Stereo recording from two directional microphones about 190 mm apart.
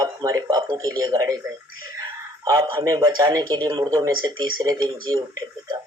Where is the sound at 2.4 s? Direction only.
20° right (ahead or behind).